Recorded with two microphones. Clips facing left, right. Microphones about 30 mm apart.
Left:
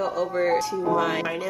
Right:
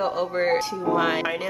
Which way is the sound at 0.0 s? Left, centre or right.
Right.